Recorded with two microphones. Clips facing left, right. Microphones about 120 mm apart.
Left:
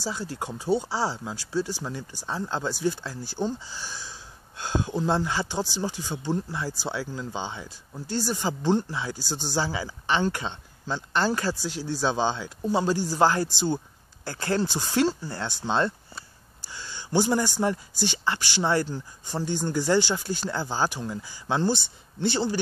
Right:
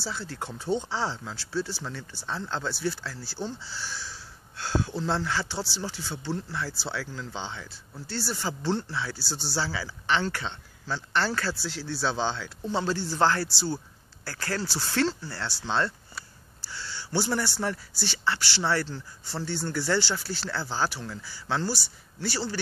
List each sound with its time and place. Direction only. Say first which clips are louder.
0.0 s speech: left 3 dB; 15° left (ahead or behind)